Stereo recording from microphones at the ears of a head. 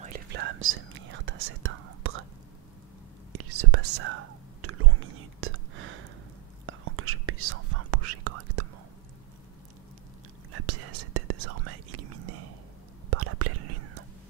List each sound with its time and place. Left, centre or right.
0.0 s whispering: right
3.3 s whispering: right
10.5 s whispering: right